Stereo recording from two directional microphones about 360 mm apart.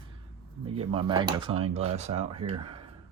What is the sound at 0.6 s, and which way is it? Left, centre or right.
Speech, centre.